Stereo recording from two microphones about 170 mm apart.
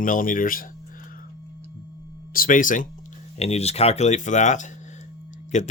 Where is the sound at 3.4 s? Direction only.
40° left (ahead or behind).